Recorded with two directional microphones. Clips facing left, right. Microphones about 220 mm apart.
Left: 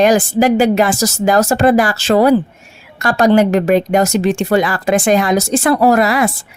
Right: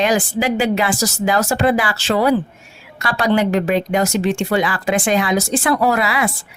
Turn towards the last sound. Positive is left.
turn(degrees=45)  # may be behind; listen again after turning